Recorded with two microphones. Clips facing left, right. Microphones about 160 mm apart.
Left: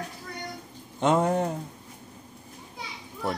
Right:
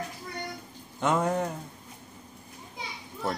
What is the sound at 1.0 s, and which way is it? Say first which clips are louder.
Speech: left 3 dB; 25° left (ahead or behind).